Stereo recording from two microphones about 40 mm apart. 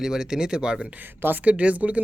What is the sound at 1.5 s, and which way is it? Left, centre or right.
Speech, right.